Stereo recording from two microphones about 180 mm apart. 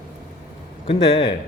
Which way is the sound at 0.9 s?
35° left (ahead or behind).